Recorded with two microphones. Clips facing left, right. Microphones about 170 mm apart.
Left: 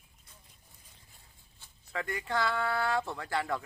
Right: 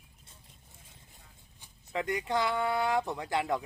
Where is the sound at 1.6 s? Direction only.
20° right (ahead or behind).